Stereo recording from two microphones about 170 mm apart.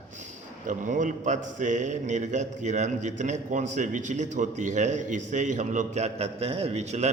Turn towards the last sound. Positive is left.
turn(degrees=-40)  # may be behind; listen again after turning